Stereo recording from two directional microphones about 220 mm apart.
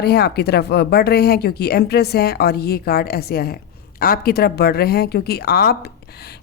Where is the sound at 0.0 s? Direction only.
45° left (ahead or behind).